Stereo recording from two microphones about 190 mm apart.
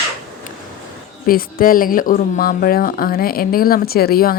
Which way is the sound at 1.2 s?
50° left (ahead or behind).